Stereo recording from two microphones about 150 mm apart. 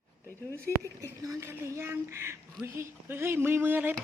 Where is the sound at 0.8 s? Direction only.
20° right (ahead or behind).